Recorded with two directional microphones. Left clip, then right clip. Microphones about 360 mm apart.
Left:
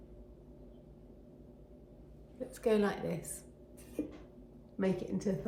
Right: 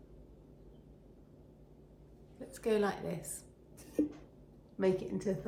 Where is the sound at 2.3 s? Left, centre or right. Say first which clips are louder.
Left 2 dB; centre.